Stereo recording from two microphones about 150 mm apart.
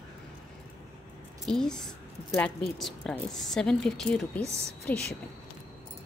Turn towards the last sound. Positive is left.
turn(degrees=5)  # may be behind; listen again after turning